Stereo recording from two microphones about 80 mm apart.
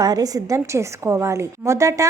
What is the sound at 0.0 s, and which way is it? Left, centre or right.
A woman's voice, right.